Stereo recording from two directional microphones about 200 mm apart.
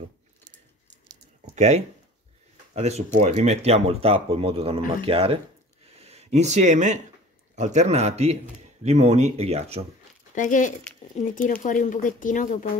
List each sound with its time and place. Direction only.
1.5 s speech: 35° right (ahead or behind)
10.3 s speech: 40° left (ahead or behind)